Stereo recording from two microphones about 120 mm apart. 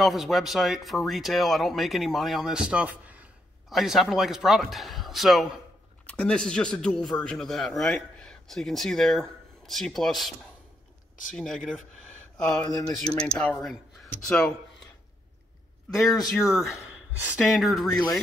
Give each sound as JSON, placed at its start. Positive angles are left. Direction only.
{"t": 0.0, "sound": "a man's voice", "side_deg": 0}
{"t": 11.3, "sound": "a man's voice", "side_deg": 5}
{"t": 15.9, "sound": "a man's voice", "side_deg": 0}
{"t": 17.8, "sound": "speech", "side_deg": 35}